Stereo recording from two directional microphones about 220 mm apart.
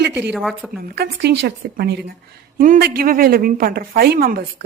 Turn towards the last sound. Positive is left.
turn(degrees=-45)  # may be behind; listen again after turning